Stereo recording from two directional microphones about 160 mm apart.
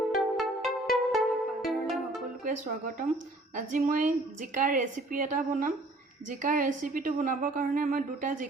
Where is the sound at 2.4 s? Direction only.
55° right (ahead or behind).